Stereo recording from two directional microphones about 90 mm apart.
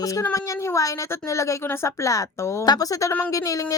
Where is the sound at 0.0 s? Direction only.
40° left (ahead or behind).